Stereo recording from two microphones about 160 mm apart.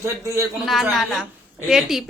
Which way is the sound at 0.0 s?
20° right (ahead or behind).